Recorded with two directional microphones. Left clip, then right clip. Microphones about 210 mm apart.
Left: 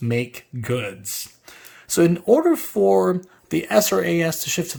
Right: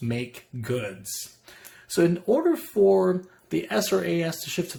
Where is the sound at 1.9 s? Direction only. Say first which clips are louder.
Left 6 dB; 40° left (ahead or behind).